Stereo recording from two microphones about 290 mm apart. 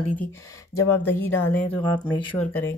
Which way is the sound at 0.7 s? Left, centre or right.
Centre.